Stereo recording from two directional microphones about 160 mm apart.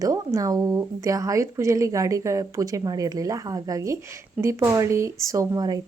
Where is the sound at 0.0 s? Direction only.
20° right (ahead or behind).